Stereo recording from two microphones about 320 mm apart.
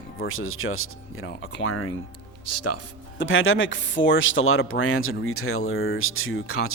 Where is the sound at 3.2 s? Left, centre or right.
Left.